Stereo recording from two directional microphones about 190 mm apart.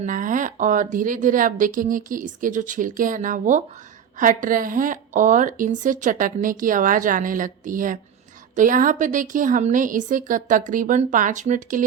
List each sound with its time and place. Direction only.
0.0 s a woman's voice: 45° right (ahead or behind)